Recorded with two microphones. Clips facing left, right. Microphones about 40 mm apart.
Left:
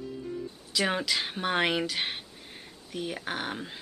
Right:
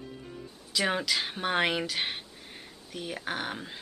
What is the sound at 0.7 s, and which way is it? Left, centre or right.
Speech, centre.